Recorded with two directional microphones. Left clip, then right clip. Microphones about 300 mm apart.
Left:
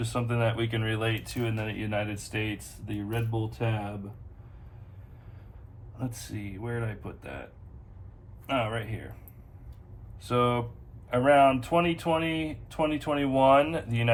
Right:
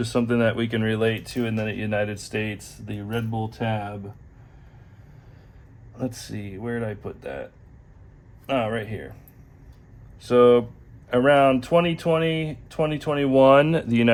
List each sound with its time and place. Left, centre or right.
0.0 s speech: right
6.0 s speech: right
8.4 s speech: right
10.2 s speech: right